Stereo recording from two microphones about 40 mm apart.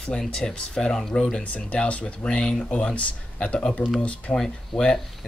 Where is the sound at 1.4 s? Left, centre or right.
Left.